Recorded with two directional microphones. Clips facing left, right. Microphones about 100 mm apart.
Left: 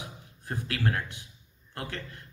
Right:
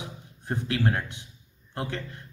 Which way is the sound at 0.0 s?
25° right (ahead or behind).